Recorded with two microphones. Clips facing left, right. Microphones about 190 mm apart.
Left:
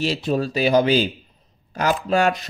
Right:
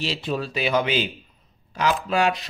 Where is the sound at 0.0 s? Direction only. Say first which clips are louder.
Left 5 dB; 45° left (ahead or behind).